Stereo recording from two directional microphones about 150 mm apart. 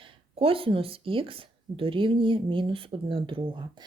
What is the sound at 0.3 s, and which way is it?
Speech, 40° right (ahead or behind).